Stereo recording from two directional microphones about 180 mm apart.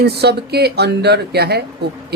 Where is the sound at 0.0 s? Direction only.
65° right (ahead or behind).